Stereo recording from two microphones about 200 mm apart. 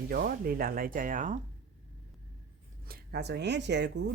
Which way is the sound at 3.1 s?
55° right (ahead or behind).